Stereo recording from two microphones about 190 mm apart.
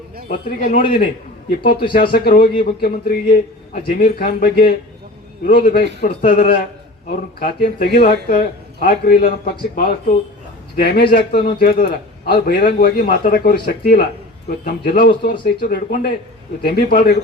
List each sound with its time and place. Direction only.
0.3 s a man's voice: 45° left (ahead or behind)
3.7 s a man's voice: 45° left (ahead or behind)